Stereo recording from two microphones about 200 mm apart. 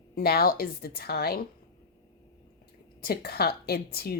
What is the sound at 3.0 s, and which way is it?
Speech, 50° left (ahead or behind).